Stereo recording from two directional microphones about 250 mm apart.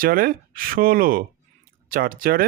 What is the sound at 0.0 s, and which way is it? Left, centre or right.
Speech, right.